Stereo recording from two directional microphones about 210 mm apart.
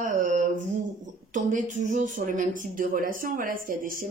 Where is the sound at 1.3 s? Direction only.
40° right (ahead or behind).